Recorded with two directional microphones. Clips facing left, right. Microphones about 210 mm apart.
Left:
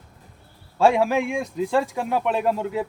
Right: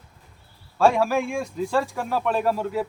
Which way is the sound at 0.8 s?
20° left (ahead or behind).